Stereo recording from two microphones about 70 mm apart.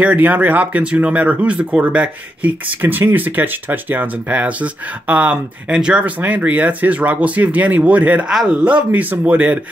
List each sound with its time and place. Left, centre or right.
0.0 s speech: centre
8.3 s speech: centre
8.6 s speech: right